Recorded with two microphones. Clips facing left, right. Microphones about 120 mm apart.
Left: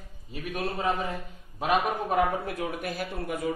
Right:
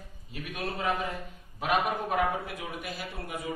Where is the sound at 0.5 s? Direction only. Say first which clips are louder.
Left 2 dB; 30° left (ahead or behind).